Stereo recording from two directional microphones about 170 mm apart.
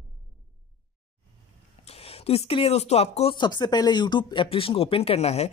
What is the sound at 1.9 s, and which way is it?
Speech, 35° left (ahead or behind).